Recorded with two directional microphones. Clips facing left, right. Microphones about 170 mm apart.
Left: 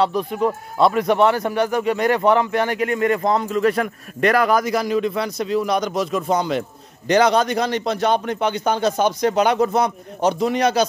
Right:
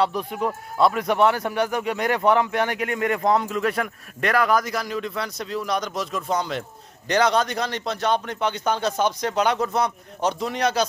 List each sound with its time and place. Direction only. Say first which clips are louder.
0.0 s speech: left 4 dB; 10° right (ahead or behind); by 10.9 s 5° left (ahead or behind)